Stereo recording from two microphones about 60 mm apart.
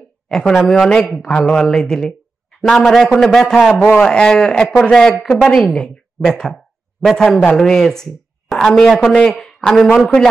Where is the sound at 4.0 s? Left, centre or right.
Centre.